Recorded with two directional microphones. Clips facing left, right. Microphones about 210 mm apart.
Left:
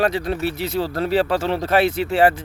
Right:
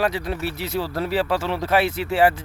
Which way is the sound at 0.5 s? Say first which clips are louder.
Left 3 dB; centre (ahead or behind).